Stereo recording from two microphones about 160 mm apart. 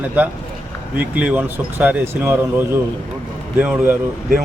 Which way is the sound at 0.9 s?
10° right (ahead or behind).